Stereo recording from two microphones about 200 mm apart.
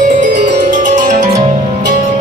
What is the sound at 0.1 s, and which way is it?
Music, 40° right (ahead or behind).